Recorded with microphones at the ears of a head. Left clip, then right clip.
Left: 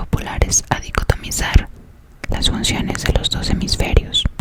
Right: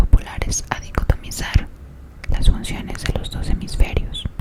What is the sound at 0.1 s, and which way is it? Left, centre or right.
Whispering, left.